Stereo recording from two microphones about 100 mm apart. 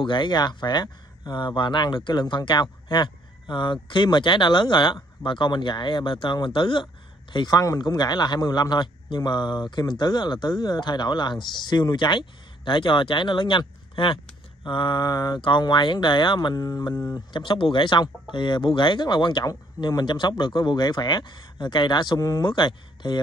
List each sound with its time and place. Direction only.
0.0 s speech: 55° left (ahead or behind)
7.3 s speech: 40° left (ahead or behind)
17.4 s speech: 60° left (ahead or behind)